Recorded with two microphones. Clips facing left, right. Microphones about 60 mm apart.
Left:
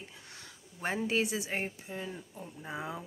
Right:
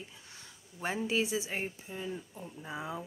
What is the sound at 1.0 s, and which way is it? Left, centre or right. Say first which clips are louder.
A woman's voice: right 1 dB; left.